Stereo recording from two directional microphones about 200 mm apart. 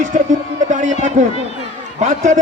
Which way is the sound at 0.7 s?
35° right (ahead or behind).